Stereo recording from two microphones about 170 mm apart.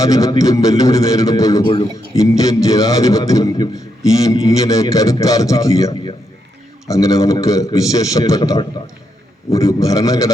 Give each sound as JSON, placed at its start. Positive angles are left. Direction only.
{"t": 0.0, "sound": "a man's voice", "side_deg": 20}